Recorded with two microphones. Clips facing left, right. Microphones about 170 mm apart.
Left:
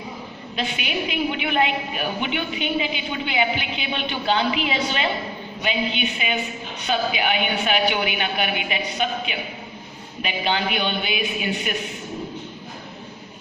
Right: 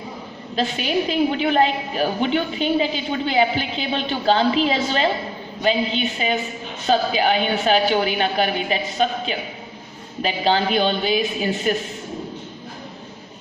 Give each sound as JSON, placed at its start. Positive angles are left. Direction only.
{"t": 0.6, "sound": "a woman's voice", "side_deg": -35}